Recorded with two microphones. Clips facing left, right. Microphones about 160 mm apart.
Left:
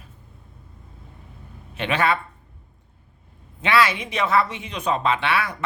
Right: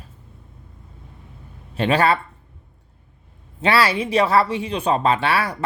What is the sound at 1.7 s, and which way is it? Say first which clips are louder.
Speech: right 4 dB; 35° right (ahead or behind).